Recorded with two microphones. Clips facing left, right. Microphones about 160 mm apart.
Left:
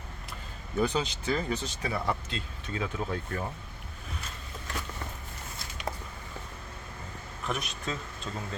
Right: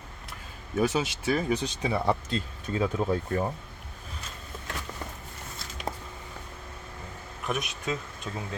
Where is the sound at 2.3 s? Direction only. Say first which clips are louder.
Right 6 dB; 35° right (ahead or behind).